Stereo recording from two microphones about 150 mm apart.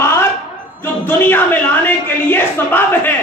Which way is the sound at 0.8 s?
15° left (ahead or behind).